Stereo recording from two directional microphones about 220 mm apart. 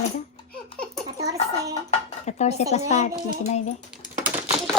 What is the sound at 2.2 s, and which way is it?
Speech, 30° left (ahead or behind).